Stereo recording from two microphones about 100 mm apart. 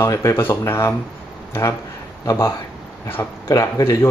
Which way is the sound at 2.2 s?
35° left (ahead or behind).